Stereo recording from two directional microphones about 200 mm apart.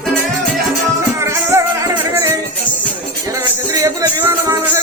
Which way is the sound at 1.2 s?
15° right (ahead or behind).